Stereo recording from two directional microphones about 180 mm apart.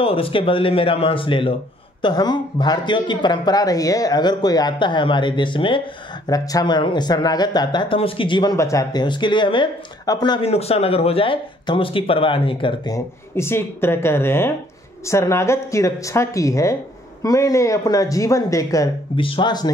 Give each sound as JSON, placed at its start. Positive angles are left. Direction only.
{"t": 0.0, "sound": "speech", "side_deg": 30}